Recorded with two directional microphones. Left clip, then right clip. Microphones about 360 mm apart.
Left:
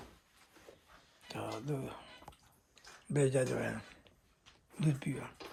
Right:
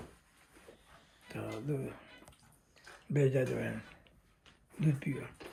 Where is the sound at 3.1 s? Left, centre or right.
Centre.